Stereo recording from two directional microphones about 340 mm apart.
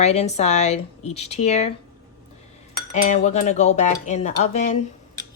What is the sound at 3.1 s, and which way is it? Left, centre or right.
Speech, centre.